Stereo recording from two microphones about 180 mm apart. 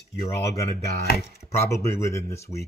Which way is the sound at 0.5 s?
15° left (ahead or behind).